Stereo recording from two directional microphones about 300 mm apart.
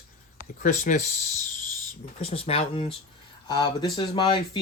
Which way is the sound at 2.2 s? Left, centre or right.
Centre.